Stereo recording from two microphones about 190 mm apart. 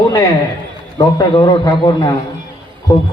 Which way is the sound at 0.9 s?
25° left (ahead or behind).